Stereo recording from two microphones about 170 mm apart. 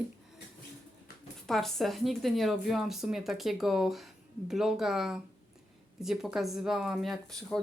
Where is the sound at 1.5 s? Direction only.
Centre (ahead or behind).